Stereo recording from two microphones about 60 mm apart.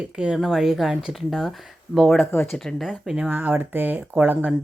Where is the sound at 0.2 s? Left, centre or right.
Centre.